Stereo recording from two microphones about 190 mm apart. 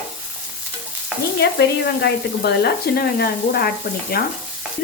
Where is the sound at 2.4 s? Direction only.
55° left (ahead or behind).